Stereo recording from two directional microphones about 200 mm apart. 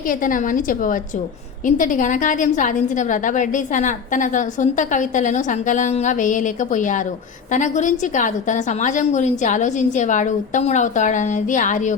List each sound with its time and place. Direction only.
0.1 s a woman's voice: 40° left (ahead or behind)